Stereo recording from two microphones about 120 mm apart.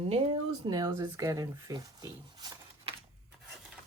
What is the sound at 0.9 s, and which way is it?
Speech, 25° right (ahead or behind).